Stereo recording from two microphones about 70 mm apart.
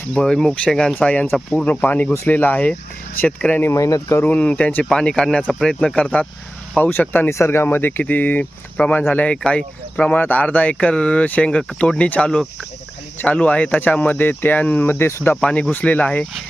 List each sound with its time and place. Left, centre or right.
0.1 s speech: centre
0.9 s speech: centre
3.8 s speech: left
4.2 s speech: left
7.3 s speech: left
15.7 s speech: left